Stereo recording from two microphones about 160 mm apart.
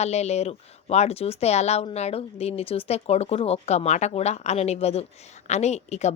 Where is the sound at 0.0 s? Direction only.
45° left (ahead or behind).